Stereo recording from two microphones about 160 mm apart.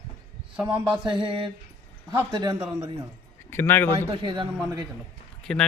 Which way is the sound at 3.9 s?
35° right (ahead or behind).